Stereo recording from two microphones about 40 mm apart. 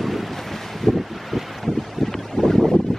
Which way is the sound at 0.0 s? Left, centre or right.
Centre.